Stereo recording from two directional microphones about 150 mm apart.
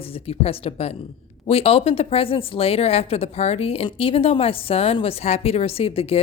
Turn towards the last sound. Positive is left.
turn(degrees=40)  # may be behind; listen again after turning